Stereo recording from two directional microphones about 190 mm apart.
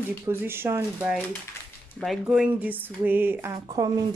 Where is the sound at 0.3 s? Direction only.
10° right (ahead or behind).